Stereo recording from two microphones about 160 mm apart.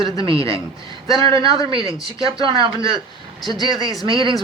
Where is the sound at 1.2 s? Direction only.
30° right (ahead or behind).